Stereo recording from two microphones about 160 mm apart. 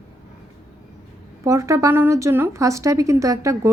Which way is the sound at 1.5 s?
20° right (ahead or behind).